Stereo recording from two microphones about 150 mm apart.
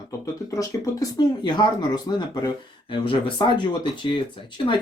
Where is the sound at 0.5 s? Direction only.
20° left (ahead or behind).